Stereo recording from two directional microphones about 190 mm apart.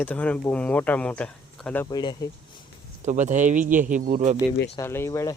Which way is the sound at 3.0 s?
40° right (ahead or behind).